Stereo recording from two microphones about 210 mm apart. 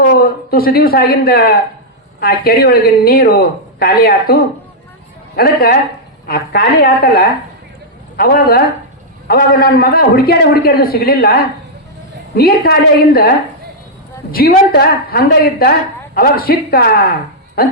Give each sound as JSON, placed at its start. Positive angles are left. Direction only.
{"t": 0.0, "sound": "a man's voice", "side_deg": 45}
{"t": 14.3, "sound": "a man's voice", "side_deg": 45}